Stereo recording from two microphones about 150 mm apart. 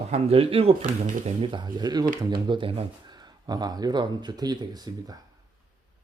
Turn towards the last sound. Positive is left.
turn(degrees=-25)  # may be behind; listen again after turning